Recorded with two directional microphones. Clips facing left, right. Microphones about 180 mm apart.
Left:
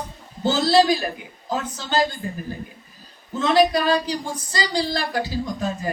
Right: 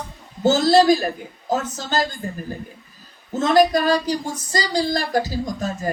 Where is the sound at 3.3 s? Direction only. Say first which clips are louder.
Right 2 dB; 45° right (ahead or behind).